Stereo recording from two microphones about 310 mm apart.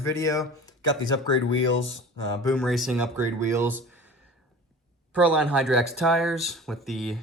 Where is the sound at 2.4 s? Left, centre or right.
Centre.